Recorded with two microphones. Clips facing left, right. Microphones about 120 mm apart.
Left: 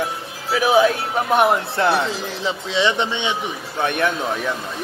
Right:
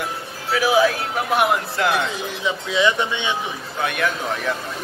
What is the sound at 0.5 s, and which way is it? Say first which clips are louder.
Speech: left 2 dB; 25° left (ahead or behind).